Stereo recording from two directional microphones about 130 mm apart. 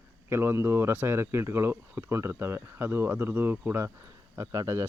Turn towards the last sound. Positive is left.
turn(degrees=-25)  # may be behind; listen again after turning